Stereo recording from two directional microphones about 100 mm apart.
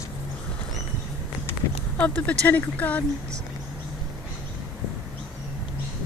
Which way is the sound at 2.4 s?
15° left (ahead or behind).